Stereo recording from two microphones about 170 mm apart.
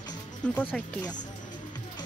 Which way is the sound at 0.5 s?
10° left (ahead or behind).